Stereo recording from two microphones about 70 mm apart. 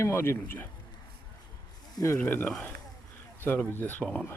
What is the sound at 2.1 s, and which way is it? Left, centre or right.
Speech, left.